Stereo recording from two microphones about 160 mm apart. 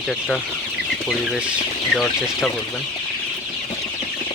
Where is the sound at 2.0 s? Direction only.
Centre (ahead or behind).